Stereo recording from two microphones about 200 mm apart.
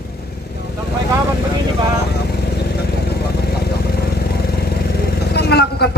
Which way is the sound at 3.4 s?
50° left (ahead or behind).